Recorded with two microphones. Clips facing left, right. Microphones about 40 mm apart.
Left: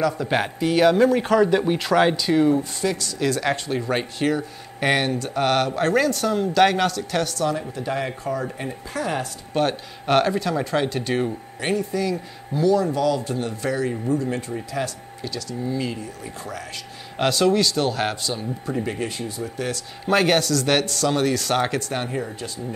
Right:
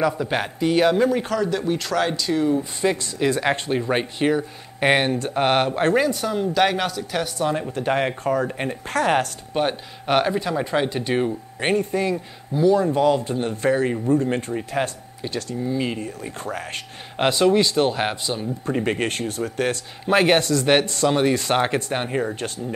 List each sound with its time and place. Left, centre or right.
0.2 s a man's voice: centre
1.3 s speech: centre
2.8 s speech: right
5.9 s speech: centre
7.3 s speech: right
7.7 s speech: right
9.5 s speech: centre
11.6 s a man's voice: right
17.2 s speech: right
18.7 s speech: right
20.1 s speech: right